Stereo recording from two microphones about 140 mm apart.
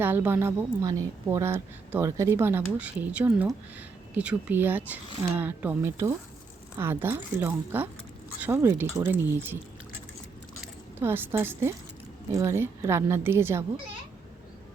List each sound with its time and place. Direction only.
0.0 s a woman's voice: 15° right (ahead or behind)
11.0 s a woman's voice: 15° right (ahead or behind)